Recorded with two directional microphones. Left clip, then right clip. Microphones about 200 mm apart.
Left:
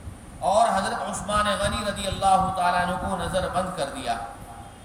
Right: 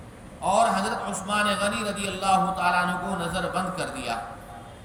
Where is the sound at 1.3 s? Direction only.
15° left (ahead or behind).